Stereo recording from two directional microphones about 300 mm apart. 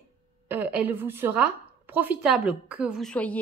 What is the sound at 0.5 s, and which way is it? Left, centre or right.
A woman's voice, centre.